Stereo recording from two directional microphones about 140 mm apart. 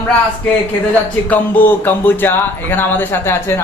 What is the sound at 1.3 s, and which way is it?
Speech, 15° left (ahead or behind).